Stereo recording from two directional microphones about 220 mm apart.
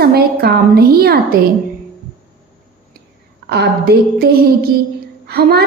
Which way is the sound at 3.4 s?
50° right (ahead or behind).